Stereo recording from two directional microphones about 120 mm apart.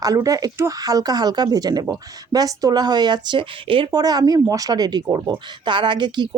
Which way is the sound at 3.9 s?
30° right (ahead or behind).